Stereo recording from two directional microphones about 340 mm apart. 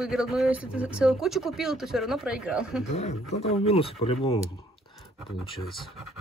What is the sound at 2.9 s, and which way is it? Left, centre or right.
Speech, centre.